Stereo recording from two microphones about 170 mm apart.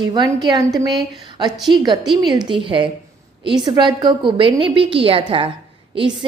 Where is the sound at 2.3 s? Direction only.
25° right (ahead or behind).